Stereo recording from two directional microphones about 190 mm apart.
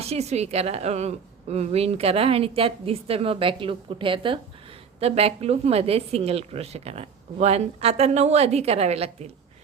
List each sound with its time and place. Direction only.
0.0 s a woman's voice: 35° right (ahead or behind)